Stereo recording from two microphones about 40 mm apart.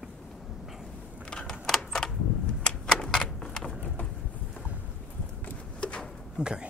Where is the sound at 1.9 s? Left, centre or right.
Centre.